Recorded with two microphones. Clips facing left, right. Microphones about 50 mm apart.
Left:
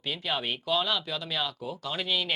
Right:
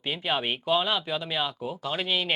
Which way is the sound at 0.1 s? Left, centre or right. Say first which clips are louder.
Right 3 dB; right.